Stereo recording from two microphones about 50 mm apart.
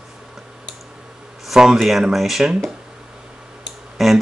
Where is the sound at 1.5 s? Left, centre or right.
Centre.